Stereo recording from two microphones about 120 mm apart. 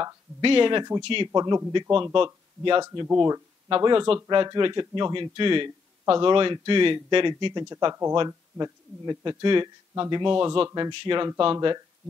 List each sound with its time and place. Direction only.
0.4 s speech: 45° right (ahead or behind)
3.2 s speech: 30° right (ahead or behind)
7.7 s speech: 30° right (ahead or behind)